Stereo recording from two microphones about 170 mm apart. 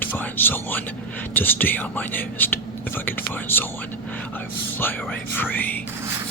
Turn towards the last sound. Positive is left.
turn(degrees=10)  # may be behind; listen again after turning